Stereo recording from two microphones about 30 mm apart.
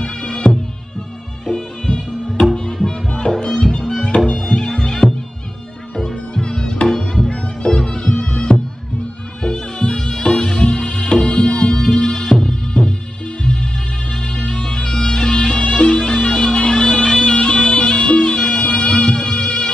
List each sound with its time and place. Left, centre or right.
0.0 s music: left
2.9 s music: left; by 12.8 s centre
14.6 s music: left
15.6 s music: left
15.9 s music: left
17.3 s music: left
19.3 s music: left